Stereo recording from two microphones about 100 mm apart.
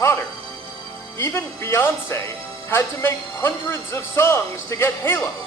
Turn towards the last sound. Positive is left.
turn(degrees=20)  # may be behind; listen again after turning